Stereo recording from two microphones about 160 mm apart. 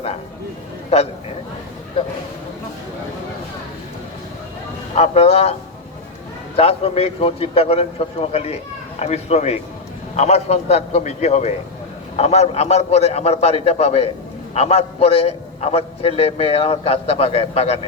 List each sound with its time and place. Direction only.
4.9 s a man's voice: 40° left (ahead or behind)
6.6 s a man's voice: 35° left (ahead or behind)